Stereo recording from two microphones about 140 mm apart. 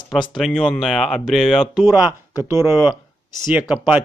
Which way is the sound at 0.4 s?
5° left (ahead or behind).